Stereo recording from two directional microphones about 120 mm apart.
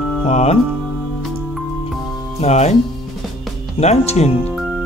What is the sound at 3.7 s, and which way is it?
Speech, 60° left (ahead or behind).